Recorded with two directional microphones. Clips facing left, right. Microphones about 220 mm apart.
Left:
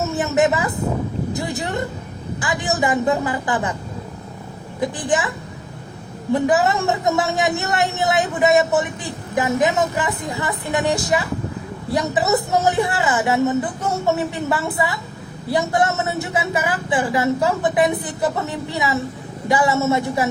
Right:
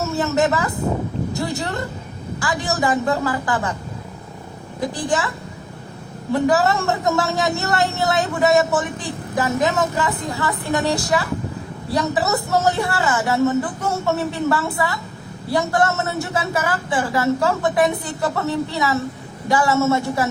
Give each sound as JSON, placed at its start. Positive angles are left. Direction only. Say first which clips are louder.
{"t": 0.0, "sound": "a woman's voice", "louder": "left 1 dB", "side_deg": 20}
{"t": 5.0, "sound": "speech", "louder": "left 1 dB", "side_deg": 20}
{"t": 6.5, "sound": "a woman's voice", "louder": "even", "side_deg": 20}